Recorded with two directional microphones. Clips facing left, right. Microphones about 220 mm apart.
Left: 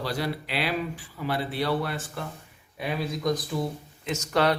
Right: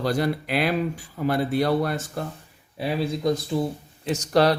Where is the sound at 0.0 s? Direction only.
45° right (ahead or behind).